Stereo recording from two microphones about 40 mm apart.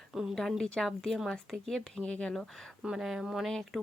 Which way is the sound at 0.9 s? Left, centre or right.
Centre.